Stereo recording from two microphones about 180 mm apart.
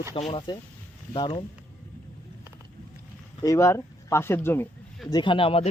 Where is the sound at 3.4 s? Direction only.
15° left (ahead or behind).